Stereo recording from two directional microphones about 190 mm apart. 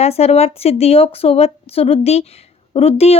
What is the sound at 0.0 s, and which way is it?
Speech, 30° left (ahead or behind).